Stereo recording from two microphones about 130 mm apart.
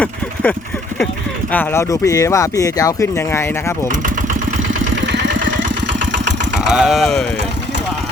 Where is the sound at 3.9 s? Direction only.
85° right.